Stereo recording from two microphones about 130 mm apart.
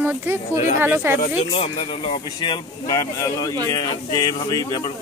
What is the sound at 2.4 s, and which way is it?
Speech, 30° left (ahead or behind).